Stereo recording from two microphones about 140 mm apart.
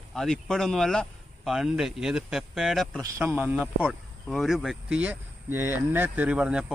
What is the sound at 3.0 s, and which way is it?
A man's voice, 20° right (ahead or behind).